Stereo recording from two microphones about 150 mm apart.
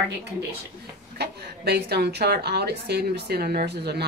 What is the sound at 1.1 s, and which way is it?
A woman's voice, 90° right.